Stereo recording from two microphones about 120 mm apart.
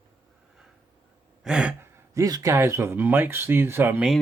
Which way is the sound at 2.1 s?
30° right (ahead or behind).